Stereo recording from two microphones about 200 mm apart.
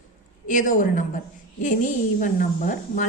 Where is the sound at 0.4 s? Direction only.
40° left (ahead or behind).